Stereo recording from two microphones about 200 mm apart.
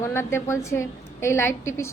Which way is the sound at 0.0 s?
10° left (ahead or behind).